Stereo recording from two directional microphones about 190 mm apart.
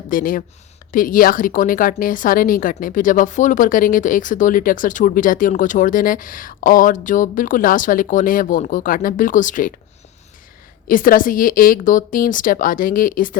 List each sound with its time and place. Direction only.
0.1 s a woman's voice: 45° left (ahead or behind)
10.8 s a woman's voice: 45° left (ahead or behind)